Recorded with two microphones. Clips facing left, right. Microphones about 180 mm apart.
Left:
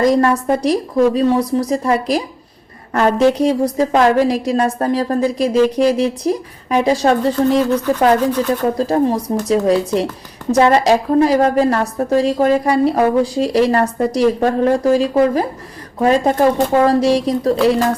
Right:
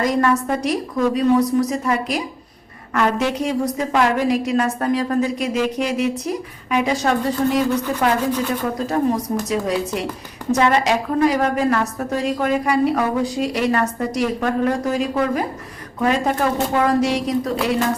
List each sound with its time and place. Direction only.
0.0 s a woman's voice: 35° left (ahead or behind)
8.6 s a woman's voice: 35° left (ahead or behind)